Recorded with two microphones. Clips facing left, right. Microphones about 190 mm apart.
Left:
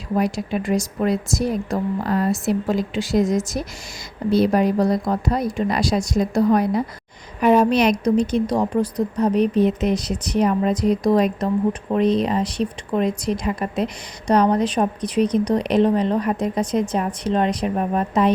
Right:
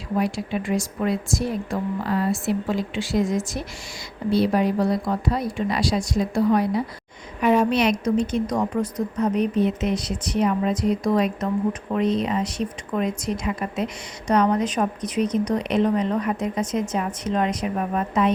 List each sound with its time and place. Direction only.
0.2 s speech: 40° left (ahead or behind)